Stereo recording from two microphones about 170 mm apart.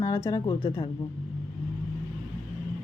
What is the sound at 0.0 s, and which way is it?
Speech, 20° left (ahead or behind).